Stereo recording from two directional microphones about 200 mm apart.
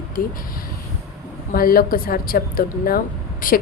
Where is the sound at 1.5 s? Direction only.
45° left (ahead or behind).